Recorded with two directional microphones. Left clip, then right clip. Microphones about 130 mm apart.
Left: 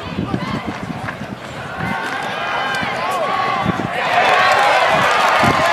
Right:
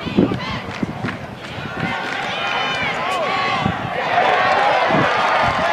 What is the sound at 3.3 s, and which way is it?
Run, 10° right (ahead or behind).